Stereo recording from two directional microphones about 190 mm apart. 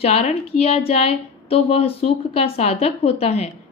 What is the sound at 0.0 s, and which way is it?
A woman's voice, 35° left (ahead or behind).